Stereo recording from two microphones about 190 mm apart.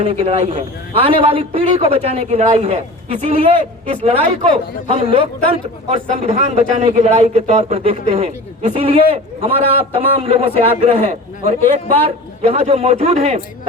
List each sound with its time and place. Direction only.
0.0 s a man's voice: 30° right (ahead or behind)